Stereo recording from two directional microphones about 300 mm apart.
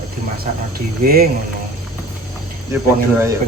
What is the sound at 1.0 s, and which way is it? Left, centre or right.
Speech, right.